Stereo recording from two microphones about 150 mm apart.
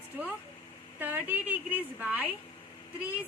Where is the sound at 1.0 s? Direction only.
10° right (ahead or behind).